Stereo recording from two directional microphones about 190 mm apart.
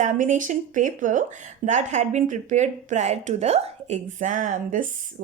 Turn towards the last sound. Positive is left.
turn(degrees=-45)  # may be behind; listen again after turning